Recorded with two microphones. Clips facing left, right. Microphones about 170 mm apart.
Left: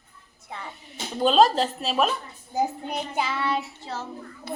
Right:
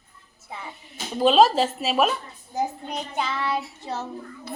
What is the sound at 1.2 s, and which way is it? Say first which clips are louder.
Speech: right 2 dB; 5° right (ahead or behind).